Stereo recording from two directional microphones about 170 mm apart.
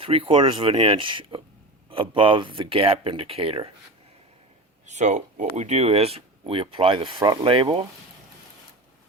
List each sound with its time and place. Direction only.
0.0 s speech: 35° right (ahead or behind)
4.9 s speech: 45° right (ahead or behind)